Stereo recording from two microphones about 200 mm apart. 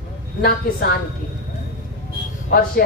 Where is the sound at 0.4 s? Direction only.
50° left (ahead or behind).